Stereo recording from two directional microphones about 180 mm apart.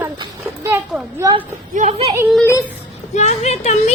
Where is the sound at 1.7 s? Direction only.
35° right (ahead or behind).